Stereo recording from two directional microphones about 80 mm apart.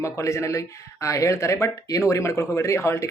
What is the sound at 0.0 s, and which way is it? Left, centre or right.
Speech, left.